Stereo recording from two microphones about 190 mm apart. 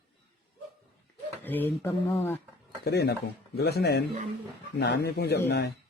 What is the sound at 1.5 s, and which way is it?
Speech, 10° left (ahead or behind).